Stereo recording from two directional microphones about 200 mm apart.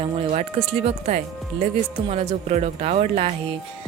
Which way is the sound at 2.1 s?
30° right (ahead or behind).